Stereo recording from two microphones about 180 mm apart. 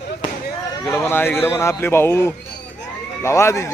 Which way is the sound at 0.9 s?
10° left (ahead or behind).